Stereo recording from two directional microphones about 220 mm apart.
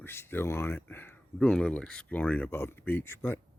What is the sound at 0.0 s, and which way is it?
Speech, 10° left (ahead or behind).